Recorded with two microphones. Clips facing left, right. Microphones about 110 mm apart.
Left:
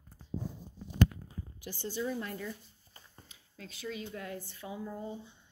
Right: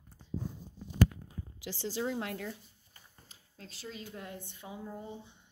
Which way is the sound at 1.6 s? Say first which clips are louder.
Right 1 dB; 90° right.